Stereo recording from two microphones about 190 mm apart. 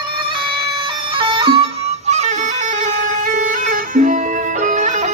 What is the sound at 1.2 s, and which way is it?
Music, 25° right (ahead or behind).